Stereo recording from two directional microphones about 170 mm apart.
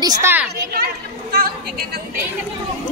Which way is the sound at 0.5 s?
65° right (ahead or behind).